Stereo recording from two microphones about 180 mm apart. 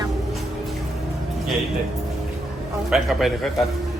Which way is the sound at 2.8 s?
Centre (ahead or behind).